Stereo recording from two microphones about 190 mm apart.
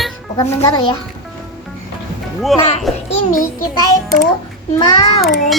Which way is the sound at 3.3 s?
45° left (ahead or behind).